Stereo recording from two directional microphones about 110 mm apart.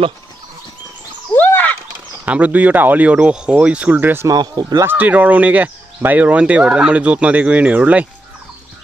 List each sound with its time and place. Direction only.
1.3 s a sound: 15° left (ahead or behind)
2.2 s speech: 15° right (ahead or behind)
4.3 s speech: 35° right (ahead or behind)
4.8 s speech: 15° right (ahead or behind)